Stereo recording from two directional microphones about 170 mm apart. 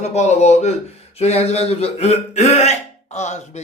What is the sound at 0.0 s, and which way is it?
Speech, 40° left (ahead or behind).